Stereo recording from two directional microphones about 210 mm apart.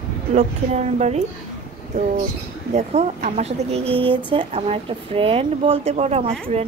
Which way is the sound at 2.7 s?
30° right (ahead or behind).